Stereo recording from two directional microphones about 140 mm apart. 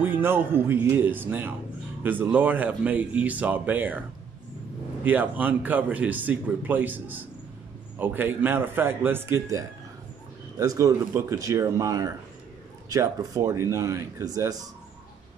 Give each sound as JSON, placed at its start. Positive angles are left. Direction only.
{"t": 0.0, "sound": "speech", "side_deg": -15}
{"t": 5.0, "sound": "speech", "side_deg": -10}